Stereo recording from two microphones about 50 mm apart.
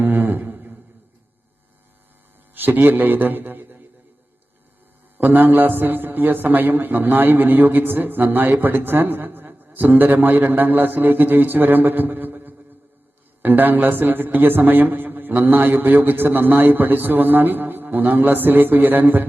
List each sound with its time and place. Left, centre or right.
0.0 s a sound: right
2.6 s a man's voice: right
5.1 s a man's voice: right